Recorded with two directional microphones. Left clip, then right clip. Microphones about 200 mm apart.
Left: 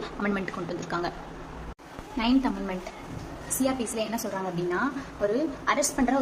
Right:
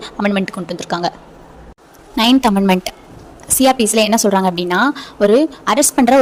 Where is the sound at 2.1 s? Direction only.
50° right (ahead or behind).